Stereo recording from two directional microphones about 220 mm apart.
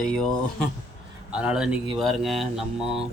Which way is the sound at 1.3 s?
5° right (ahead or behind).